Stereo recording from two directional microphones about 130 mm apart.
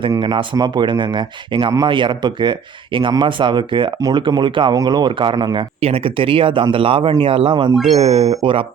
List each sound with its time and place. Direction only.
0.2 s speech: 40° right (ahead or behind)
5.8 s speech: 45° right (ahead or behind)